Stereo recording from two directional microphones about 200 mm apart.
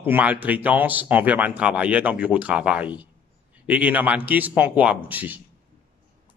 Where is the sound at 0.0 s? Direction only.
10° right (ahead or behind).